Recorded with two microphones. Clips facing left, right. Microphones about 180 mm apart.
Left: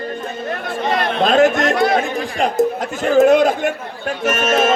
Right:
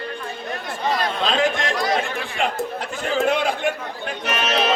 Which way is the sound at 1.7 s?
60° left (ahead or behind).